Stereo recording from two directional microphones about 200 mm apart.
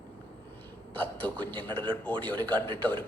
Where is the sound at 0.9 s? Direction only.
5° left (ahead or behind).